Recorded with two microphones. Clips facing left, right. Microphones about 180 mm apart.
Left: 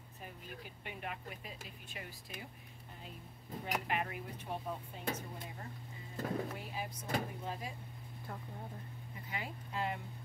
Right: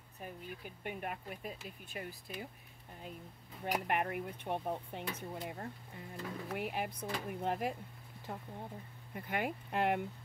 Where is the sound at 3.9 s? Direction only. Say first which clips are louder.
Right 3 dB; 55° right (ahead or behind).